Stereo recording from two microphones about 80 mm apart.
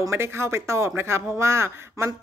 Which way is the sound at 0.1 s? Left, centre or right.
Right.